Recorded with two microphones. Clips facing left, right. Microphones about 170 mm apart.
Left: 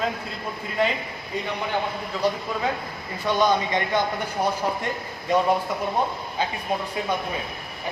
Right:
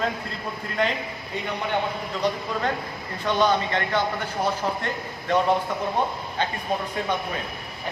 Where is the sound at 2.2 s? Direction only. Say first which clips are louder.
Left 1 dB; 5° left (ahead or behind).